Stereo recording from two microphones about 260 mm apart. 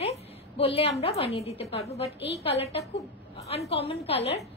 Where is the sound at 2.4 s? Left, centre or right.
Left.